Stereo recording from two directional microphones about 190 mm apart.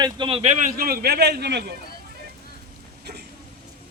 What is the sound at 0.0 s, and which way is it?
A man's voice, 25° right (ahead or behind).